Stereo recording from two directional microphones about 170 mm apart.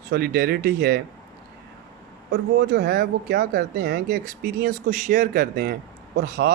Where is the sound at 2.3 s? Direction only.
75° right (ahead or behind).